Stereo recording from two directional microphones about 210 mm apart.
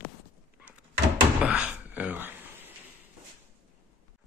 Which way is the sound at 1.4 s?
5° right (ahead or behind).